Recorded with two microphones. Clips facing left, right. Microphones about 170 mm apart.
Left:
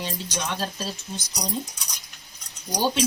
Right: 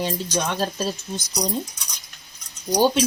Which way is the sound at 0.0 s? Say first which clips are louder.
Right 6 dB; 45° right (ahead or behind).